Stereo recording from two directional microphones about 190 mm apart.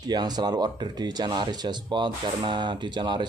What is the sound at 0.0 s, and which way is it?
Speech, 20° right (ahead or behind).